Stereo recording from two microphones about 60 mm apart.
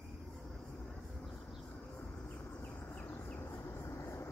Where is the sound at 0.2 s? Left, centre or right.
Centre.